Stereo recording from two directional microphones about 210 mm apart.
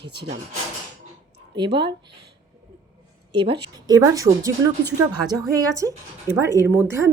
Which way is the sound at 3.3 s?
25° right (ahead or behind).